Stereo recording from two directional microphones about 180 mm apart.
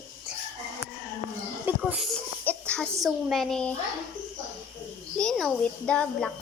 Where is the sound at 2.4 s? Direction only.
10° left (ahead or behind).